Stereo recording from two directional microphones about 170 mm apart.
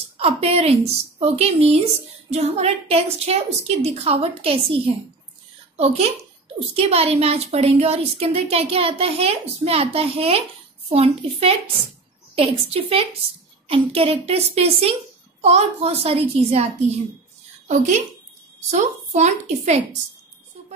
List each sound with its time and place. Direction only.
0.2 s a woman's voice: 35° right (ahead or behind)
17.6 s a woman's voice: 45° right (ahead or behind)